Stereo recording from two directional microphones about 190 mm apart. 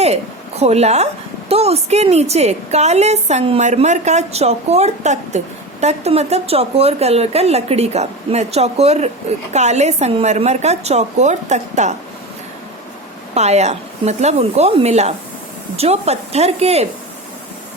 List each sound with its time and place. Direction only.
0.0 s a woman's voice: 35° right (ahead or behind)
13.3 s a woman's voice: 35° right (ahead or behind)